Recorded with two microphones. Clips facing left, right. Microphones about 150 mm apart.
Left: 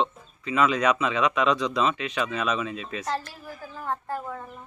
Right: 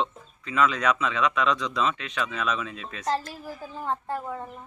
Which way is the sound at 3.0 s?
35° right (ahead or behind).